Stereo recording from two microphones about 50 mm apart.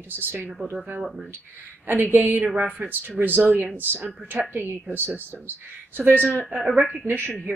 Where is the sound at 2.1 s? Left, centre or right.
Right.